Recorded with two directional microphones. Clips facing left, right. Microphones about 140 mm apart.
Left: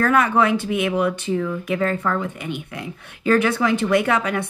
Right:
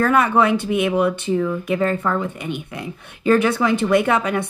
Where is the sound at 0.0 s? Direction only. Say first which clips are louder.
Right 1 dB; 25° right (ahead or behind).